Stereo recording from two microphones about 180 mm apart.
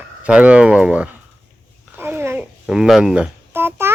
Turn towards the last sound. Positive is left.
turn(degrees=-15)  # may be behind; listen again after turning